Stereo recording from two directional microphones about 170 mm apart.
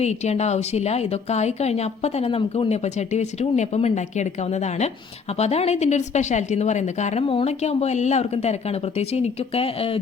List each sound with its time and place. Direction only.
0.0 s speech: 40° left (ahead or behind)